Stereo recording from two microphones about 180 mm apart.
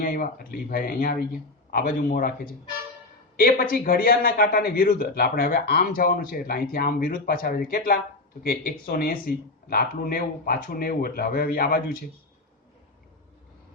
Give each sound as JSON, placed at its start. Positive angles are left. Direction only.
{"t": 0.0, "sound": "a man's voice", "side_deg": 50}